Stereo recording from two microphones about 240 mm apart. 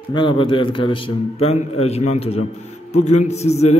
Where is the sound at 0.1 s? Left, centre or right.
Left.